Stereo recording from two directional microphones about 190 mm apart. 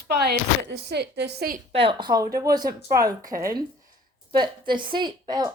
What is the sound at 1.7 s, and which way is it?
A woman's voice, 30° right (ahead or behind).